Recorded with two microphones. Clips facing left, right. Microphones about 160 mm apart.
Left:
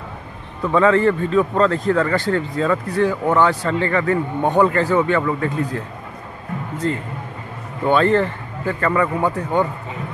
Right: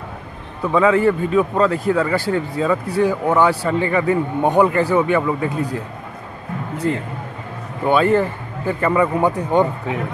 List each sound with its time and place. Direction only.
0.7 s a man's voice: 10° right (ahead or behind)
6.8 s a man's voice: 10° right (ahead or behind)